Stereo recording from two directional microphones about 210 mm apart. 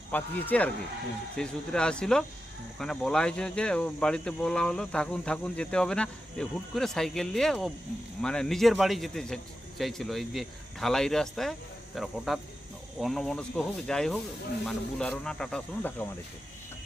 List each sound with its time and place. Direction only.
0.1 s speech: 10° left (ahead or behind)